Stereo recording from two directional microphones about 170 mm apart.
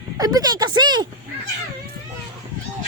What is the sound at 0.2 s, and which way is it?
Speech, 20° right (ahead or behind).